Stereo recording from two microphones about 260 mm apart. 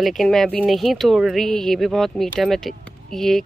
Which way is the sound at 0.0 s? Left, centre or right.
Centre.